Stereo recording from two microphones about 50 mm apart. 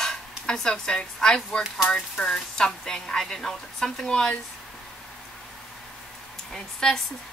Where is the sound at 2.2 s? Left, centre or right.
Centre.